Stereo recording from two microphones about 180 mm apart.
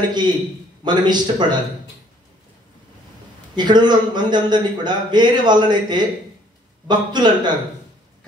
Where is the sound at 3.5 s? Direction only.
25° right (ahead or behind).